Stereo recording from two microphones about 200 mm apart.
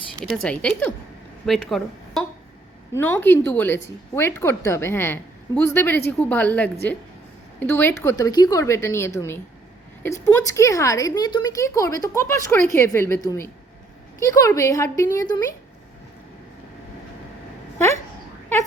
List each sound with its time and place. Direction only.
0.2 s speech: 5° left (ahead or behind)